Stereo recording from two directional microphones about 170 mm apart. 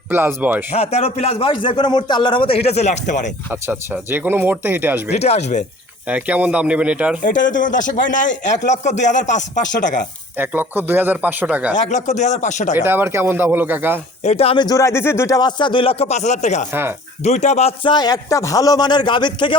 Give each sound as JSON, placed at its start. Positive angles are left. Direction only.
{"t": 0.1, "sound": "speech", "side_deg": -10}
{"t": 0.8, "sound": "a man's voice", "side_deg": 35}
{"t": 3.5, "sound": "speech", "side_deg": -10}
{"t": 5.1, "sound": "a man's voice", "side_deg": 40}
{"t": 6.1, "sound": "speech", "side_deg": -10}
{"t": 7.2, "sound": "speech", "side_deg": 50}
{"t": 10.3, "sound": "speech", "side_deg": -10}
{"t": 11.7, "sound": "speech", "side_deg": 45}
{"t": 12.7, "sound": "speech", "side_deg": -10}
{"t": 14.3, "sound": "a man's voice", "side_deg": 35}
{"t": 17.9, "sound": "speech", "side_deg": 25}